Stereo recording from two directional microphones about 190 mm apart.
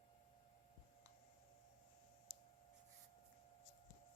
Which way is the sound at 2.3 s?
25° right (ahead or behind).